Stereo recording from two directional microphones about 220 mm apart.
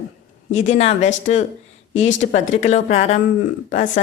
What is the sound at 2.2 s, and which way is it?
Speech, 35° left (ahead or behind).